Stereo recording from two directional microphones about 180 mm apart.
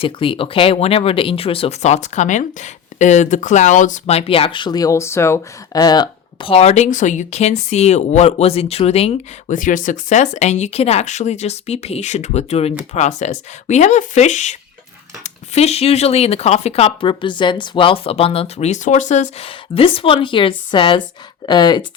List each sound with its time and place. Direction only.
0.0 s speech: 30° left (ahead or behind)
9.6 s speech: 45° left (ahead or behind); by 21.8 s 25° left (ahead or behind)